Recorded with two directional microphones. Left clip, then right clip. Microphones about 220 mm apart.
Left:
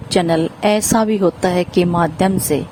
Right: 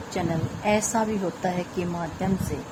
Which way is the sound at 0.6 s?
45° left (ahead or behind).